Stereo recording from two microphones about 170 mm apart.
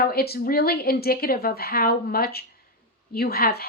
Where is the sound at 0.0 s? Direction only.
65° left (ahead or behind).